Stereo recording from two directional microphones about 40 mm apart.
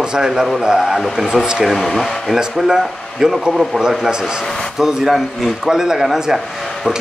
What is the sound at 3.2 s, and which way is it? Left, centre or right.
Speech, centre.